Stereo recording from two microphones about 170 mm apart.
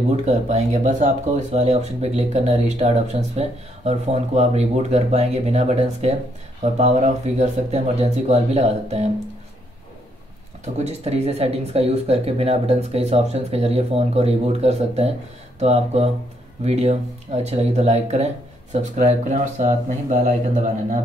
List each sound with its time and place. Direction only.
0.1 s speech: 40° right (ahead or behind)
10.6 s speech: 40° right (ahead or behind)